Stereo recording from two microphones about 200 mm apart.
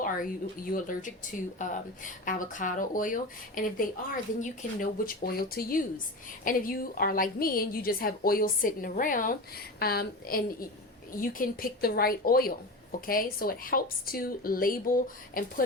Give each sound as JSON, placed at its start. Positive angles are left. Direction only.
{"t": 0.0, "sound": "speech", "side_deg": 45}